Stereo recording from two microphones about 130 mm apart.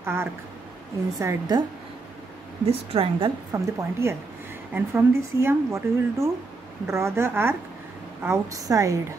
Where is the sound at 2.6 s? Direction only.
45° right (ahead or behind).